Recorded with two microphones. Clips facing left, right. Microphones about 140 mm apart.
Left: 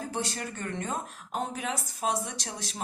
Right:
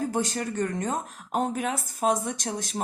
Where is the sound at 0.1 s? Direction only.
45° right (ahead or behind).